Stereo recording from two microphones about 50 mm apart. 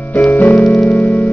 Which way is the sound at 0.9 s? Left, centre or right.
Left.